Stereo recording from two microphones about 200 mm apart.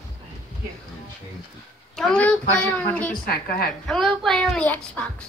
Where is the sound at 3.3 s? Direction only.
50° left (ahead or behind).